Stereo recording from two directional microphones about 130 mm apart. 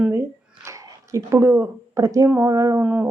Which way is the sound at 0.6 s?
25° right (ahead or behind).